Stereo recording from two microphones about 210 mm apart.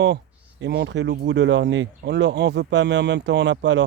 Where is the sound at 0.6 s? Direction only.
55° right (ahead or behind).